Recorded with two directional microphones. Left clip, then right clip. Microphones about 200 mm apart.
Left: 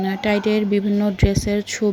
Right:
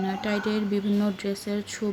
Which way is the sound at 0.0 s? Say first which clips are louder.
Left 8 dB; 25° left (ahead or behind).